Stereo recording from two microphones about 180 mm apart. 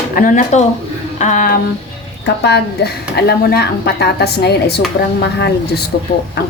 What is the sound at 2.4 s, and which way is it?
A woman's voice, 65° left (ahead or behind).